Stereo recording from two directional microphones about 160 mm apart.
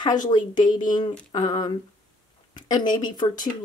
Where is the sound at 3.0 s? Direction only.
25° left (ahead or behind).